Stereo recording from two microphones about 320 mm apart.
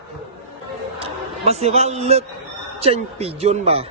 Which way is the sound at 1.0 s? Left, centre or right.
Centre.